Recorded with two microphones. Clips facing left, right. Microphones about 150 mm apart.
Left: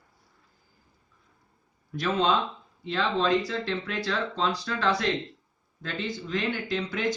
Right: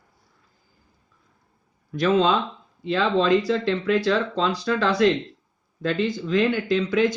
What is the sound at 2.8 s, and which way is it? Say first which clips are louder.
Speech: right 5 dB; 90° right.